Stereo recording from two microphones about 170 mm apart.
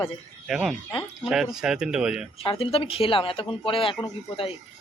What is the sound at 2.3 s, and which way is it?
Speech, 35° left (ahead or behind).